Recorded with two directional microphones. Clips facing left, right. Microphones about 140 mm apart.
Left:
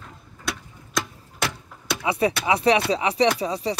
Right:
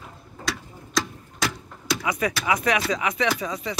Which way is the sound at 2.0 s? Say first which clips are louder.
Left 4 dB; 30° left (ahead or behind).